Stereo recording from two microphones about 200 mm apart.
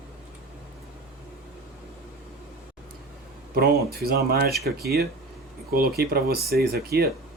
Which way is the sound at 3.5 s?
50° right (ahead or behind).